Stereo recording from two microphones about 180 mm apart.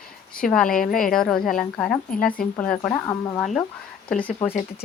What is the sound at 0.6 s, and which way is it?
Speech, 50° left (ahead or behind).